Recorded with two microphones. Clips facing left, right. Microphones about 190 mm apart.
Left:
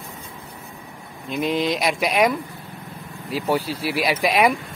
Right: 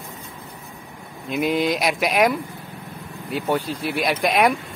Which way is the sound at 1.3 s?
Centre (ahead or behind).